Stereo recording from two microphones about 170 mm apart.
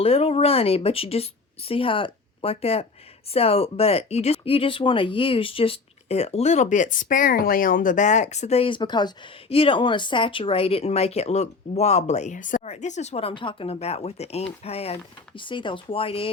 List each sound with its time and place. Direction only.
0.0 s speech: 35° left (ahead or behind)